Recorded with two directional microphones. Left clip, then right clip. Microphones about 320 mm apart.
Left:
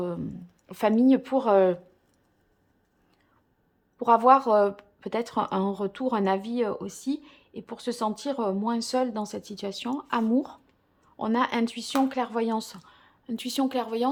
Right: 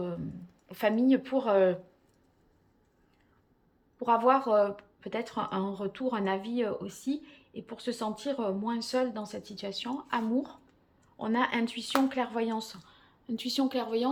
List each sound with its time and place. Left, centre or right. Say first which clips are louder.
0.0 s speech: left 5 dB; left
3.9 s a woman's voice: left 6 dB; centre